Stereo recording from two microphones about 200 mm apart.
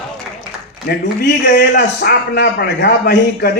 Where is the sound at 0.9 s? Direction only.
50° left (ahead or behind).